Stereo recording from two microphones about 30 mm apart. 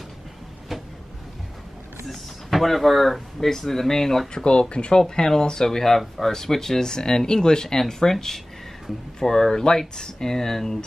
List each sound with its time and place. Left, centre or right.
2.0 s speech: centre
4.3 s speech: left
5.0 s speech: centre